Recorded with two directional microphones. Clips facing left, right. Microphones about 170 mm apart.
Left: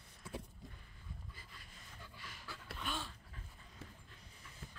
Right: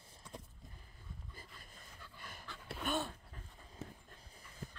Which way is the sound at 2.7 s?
55° right (ahead or behind).